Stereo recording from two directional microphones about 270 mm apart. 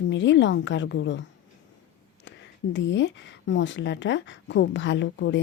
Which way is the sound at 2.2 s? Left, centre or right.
Left.